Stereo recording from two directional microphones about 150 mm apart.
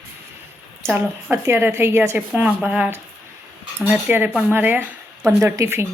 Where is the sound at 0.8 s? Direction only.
15° right (ahead or behind).